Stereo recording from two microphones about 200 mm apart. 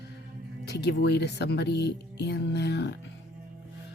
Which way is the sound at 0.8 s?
55° left (ahead or behind).